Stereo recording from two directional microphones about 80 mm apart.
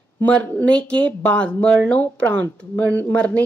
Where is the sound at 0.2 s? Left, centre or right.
Centre.